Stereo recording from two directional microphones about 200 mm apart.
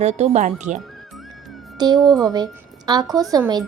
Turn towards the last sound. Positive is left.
turn(degrees=-20)  # may be behind; listen again after turning